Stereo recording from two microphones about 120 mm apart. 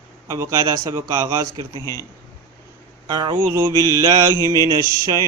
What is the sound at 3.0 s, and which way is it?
Mantra, 40° right (ahead or behind).